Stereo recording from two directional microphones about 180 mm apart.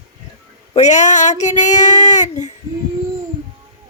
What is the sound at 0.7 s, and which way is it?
Child singing, 40° left (ahead or behind).